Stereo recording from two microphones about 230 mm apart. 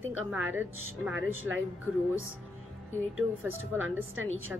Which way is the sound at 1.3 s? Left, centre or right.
Right.